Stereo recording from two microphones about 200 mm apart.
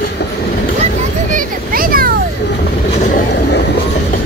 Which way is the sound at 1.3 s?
45° right (ahead or behind).